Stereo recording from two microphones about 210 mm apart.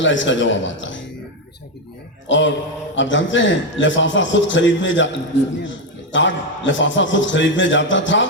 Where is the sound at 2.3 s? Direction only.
60° left (ahead or behind).